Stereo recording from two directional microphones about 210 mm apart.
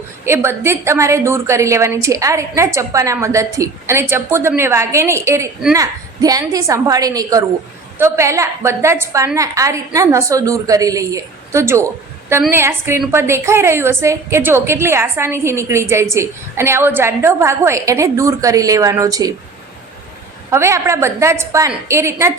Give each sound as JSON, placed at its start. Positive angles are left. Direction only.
{"t": 0.3, "sound": "a woman's voice", "side_deg": -10}
{"t": 20.5, "sound": "a woman's voice", "side_deg": -10}